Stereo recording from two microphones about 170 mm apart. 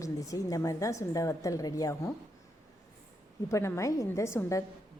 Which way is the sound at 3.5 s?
15° left (ahead or behind).